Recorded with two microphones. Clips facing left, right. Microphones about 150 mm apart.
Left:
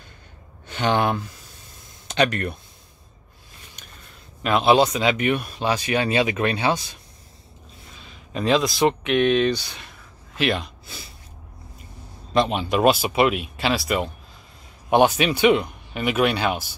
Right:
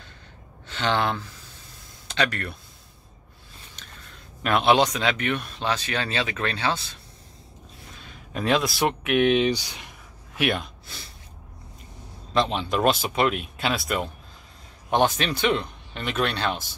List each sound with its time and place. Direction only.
0.7 s speech: 15° left (ahead or behind)
4.4 s speech: centre (ahead or behind)
8.3 s speech: centre (ahead or behind)
12.4 s speech: 5° left (ahead or behind)